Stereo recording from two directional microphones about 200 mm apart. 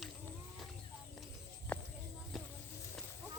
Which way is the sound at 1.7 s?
10° left (ahead or behind).